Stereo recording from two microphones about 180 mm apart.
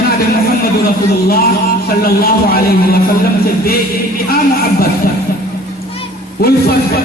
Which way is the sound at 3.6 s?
55° left (ahead or behind).